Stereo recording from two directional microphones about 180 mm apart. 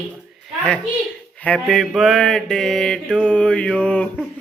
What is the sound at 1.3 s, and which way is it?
Mantra, 5° left (ahead or behind).